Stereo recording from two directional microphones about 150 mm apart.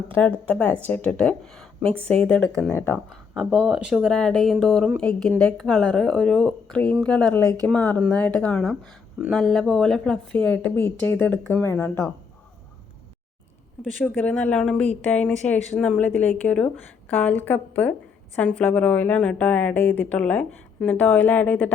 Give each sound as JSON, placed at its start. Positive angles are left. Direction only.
{"t": 0.1, "sound": "a woman's voice", "side_deg": 10}
{"t": 3.3, "sound": "speech", "side_deg": -5}
{"t": 4.1, "sound": "a woman's voice", "side_deg": 5}
{"t": 7.4, "sound": "speech", "side_deg": -25}
{"t": 7.7, "sound": "a woman's voice", "side_deg": 10}
{"t": 14.0, "sound": "a woman's voice", "side_deg": 5}